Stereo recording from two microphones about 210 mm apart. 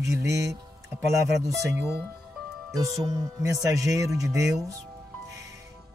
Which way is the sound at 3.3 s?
15° right (ahead or behind).